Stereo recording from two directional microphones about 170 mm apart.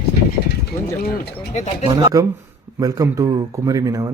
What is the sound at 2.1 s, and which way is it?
Speech, 20° right (ahead or behind).